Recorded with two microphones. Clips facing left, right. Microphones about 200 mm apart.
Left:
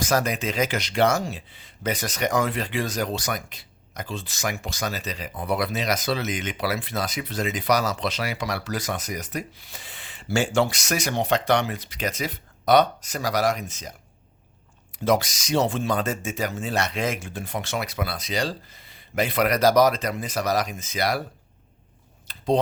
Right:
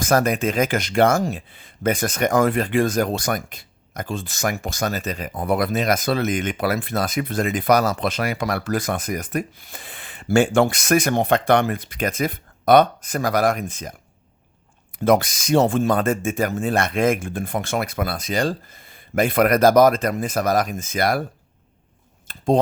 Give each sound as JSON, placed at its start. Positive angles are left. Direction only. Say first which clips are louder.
{"t": 0.0, "sound": "speech", "louder": "right 5 dB", "side_deg": -50}
{"t": 14.9, "sound": "speech", "louder": "right 5 dB", "side_deg": -55}
{"t": 22.3, "sound": "speech", "louder": "right 4 dB", "side_deg": -50}